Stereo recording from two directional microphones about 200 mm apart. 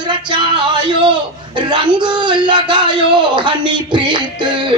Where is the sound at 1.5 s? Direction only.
20° right (ahead or behind).